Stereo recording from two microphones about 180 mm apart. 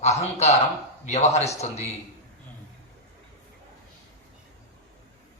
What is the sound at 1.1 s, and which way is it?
Speech, 35° left (ahead or behind).